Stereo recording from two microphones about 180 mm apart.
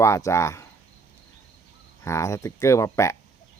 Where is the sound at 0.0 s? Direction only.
15° left (ahead or behind).